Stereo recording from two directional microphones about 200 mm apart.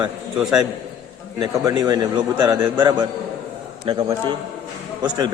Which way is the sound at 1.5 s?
20° right (ahead or behind).